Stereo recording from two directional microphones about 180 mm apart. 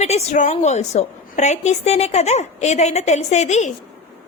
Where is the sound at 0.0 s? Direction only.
35° left (ahead or behind).